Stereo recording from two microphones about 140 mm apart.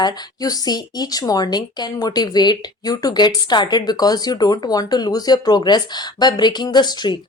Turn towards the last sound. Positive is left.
turn(degrees=30)  # may be behind; listen again after turning